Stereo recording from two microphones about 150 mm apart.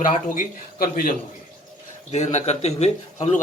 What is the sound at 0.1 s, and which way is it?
Speech, 70° left (ahead or behind).